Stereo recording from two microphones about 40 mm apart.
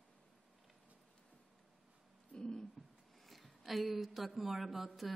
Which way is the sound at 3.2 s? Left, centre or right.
Centre.